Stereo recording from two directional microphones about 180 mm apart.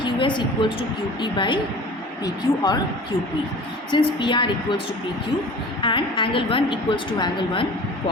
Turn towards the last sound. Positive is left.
turn(degrees=25)  # may be behind; listen again after turning